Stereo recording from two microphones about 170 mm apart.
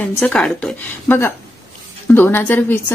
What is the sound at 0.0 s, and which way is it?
A woman's voice, 5° left (ahead or behind).